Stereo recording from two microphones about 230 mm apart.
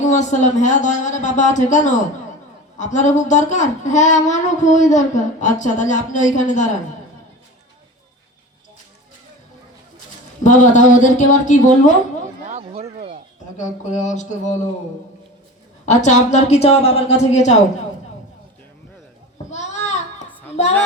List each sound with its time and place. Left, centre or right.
0.0 s a woman's voice: left
10.4 s a woman's voice: left
12.5 s speech: right
13.6 s a woman's voice: left
15.9 s a woman's voice: left
19.5 s a sound: left